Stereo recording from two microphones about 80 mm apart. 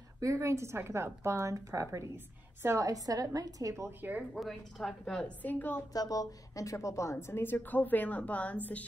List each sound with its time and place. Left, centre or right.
0.2 s a woman's voice: right
4.3 s a woman's voice: centre
5.4 s a woman's voice: left
5.9 s a woman's voice: left; by 8.8 s centre